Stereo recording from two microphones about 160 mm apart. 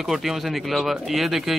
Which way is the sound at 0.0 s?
Centre (ahead or behind).